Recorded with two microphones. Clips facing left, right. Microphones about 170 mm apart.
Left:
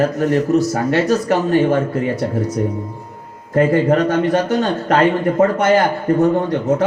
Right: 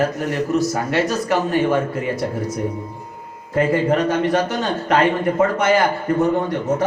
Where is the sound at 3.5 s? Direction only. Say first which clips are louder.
Left 4 dB; 45° left (ahead or behind).